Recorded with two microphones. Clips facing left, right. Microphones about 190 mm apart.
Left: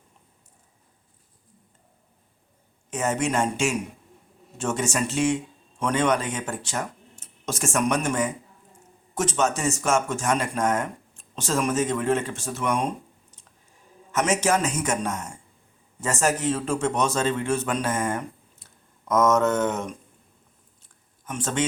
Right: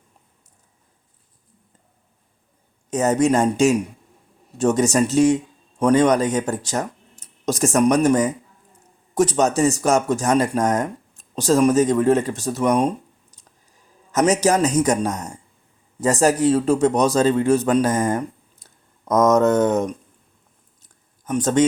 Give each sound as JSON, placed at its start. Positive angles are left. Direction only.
{"t": 2.9, "sound": "a man's voice", "side_deg": -40}
{"t": 14.1, "sound": "a man's voice", "side_deg": -40}
{"t": 21.2, "sound": "a man's voice", "side_deg": -40}